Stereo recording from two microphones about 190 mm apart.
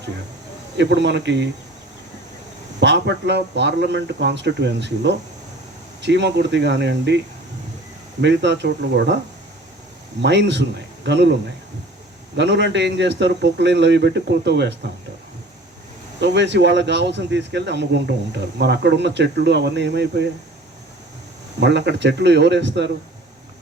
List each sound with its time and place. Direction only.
0.8 s speech: 65° right (ahead or behind)
2.8 s speech: 65° right (ahead or behind)
8.2 s speech: 65° right (ahead or behind)
10.2 s speech: 65° right (ahead or behind)
12.4 s speech: 65° right (ahead or behind)
16.2 s speech: 65° right (ahead or behind)
21.6 s speech: 65° right (ahead or behind)